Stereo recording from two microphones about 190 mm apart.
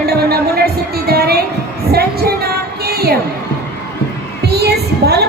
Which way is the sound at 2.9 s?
55° right (ahead or behind).